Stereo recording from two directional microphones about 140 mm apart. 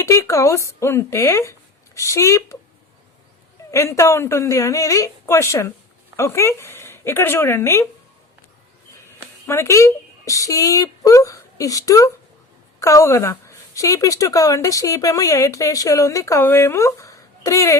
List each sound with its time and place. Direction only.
0.0 s a woman's voice: 20° left (ahead or behind)
3.7 s a woman's voice: 20° left (ahead or behind)
9.5 s a woman's voice: 20° left (ahead or behind)